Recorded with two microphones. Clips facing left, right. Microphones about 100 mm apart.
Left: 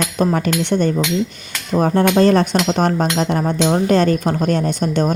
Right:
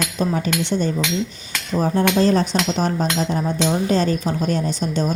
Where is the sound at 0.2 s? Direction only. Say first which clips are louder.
Left 4 dB; 55° left (ahead or behind).